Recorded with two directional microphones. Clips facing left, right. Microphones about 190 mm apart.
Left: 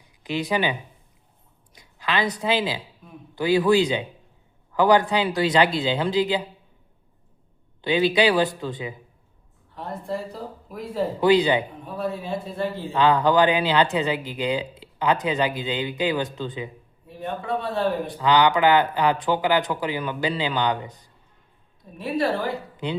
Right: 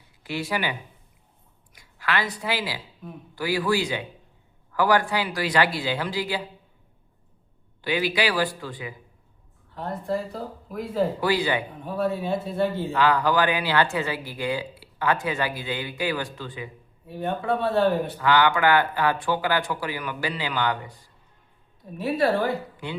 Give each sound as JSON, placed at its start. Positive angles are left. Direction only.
{"t": 0.2, "sound": "speech", "side_deg": 20}
{"t": 7.8, "sound": "speech", "side_deg": 25}
{"t": 9.7, "sound": "speech", "side_deg": 0}
{"t": 11.2, "sound": "speech", "side_deg": 20}
{"t": 11.9, "sound": "speech", "side_deg": 0}
{"t": 12.9, "sound": "speech", "side_deg": 25}
{"t": 17.1, "sound": "speech", "side_deg": 0}
{"t": 18.2, "sound": "speech", "side_deg": 20}
{"t": 21.9, "sound": "speech", "side_deg": 0}